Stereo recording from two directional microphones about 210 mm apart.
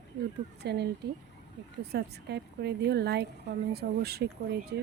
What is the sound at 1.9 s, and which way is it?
Speech, 50° right (ahead or behind).